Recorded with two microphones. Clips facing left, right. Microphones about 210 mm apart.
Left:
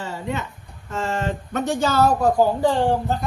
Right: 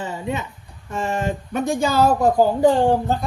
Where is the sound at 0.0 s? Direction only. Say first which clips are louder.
Right 2 dB; 15° right (ahead or behind).